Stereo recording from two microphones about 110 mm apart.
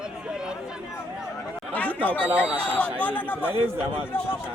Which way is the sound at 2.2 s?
15° right (ahead or behind).